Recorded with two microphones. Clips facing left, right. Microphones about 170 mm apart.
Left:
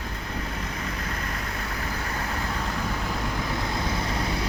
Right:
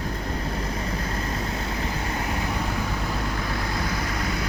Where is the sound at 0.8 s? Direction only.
30° right (ahead or behind).